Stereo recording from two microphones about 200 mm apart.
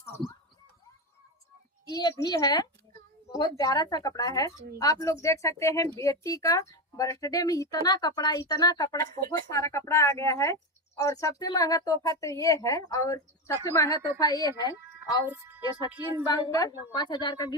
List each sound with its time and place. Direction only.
1.9 s a woman's voice: 20° left (ahead or behind)
9.0 s speech: 45° right (ahead or behind)
9.5 s a woman's voice: 15° left (ahead or behind)
15.0 s speech: 10° right (ahead or behind)
16.2 s a woman's voice: 20° left (ahead or behind)